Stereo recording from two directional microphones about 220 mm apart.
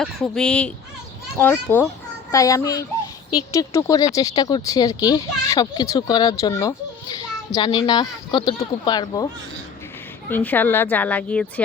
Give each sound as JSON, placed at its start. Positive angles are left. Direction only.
{"t": 0.0, "sound": "speech", "side_deg": 0}
{"t": 10.2, "sound": "speech", "side_deg": 10}